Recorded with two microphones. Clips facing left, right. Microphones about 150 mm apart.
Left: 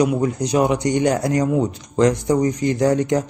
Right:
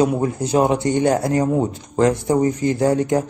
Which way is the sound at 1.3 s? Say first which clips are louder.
Even; 25° right (ahead or behind).